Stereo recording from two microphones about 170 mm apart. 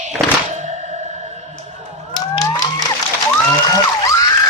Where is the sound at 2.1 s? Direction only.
25° left (ahead or behind).